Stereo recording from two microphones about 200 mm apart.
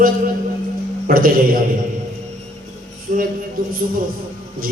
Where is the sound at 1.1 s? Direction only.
45° right (ahead or behind).